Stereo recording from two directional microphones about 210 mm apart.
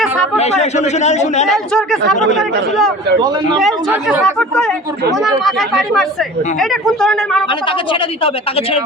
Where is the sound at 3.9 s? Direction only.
10° right (ahead or behind).